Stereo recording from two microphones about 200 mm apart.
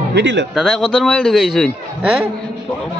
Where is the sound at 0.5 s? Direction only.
Centre (ahead or behind).